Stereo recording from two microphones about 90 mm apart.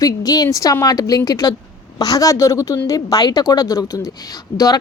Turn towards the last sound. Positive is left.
turn(degrees=40)  # may be behind; listen again after turning